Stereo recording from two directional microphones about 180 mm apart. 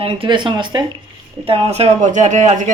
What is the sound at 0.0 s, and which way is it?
Speech, 30° right (ahead or behind).